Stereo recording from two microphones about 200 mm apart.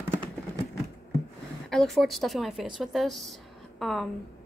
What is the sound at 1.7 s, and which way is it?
Speech, centre (ahead or behind).